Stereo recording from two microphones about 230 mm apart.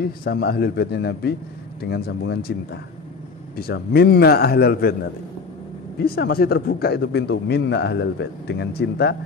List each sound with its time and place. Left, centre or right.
0.0 s a man's voice: left
6.0 s a man's voice: left